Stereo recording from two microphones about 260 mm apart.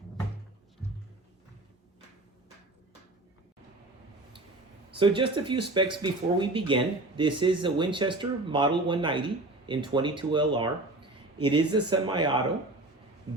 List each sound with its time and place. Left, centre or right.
4.9 s speech: centre